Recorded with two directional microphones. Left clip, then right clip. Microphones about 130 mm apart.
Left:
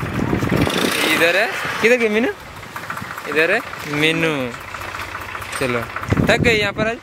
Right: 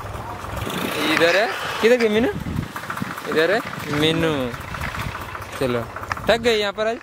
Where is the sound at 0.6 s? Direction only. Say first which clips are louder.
Left 4 dB; 20° left (ahead or behind).